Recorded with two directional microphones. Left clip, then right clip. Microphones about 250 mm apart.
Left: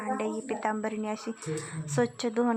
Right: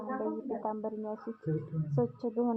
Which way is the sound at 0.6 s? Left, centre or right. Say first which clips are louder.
Left 5 dB; left.